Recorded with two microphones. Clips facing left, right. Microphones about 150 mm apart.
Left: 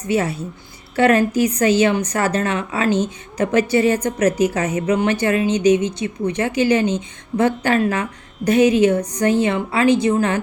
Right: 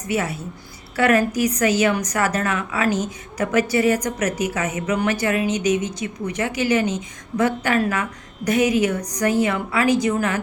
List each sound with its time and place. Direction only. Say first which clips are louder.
0.1 s a woman's voice: left 4 dB; 30° left (ahead or behind)